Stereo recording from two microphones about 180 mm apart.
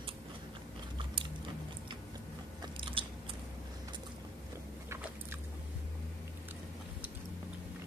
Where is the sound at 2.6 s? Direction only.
30° right (ahead or behind).